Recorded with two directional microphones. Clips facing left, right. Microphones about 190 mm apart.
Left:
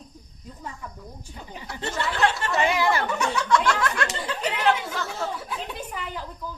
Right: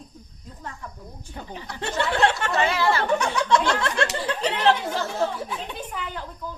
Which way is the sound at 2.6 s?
15° left (ahead or behind).